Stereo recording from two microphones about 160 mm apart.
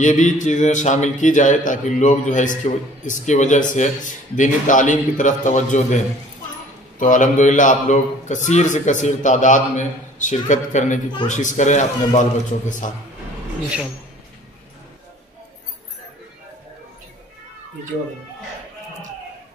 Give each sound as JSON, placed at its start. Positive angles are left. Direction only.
{"t": 0.0, "sound": "a man's voice", "side_deg": 50}
{"t": 7.0, "sound": "a man's voice", "side_deg": 55}